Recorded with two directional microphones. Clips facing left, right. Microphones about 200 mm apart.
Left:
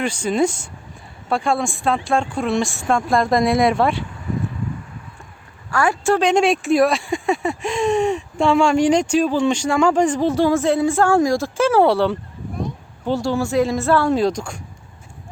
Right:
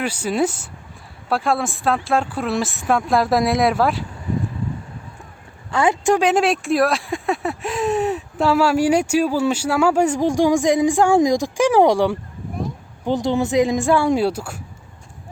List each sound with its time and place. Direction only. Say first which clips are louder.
0.0 s speech: left 1 dB; 5° right (ahead or behind)
5.7 s speech: right 1 dB; 20° right (ahead or behind)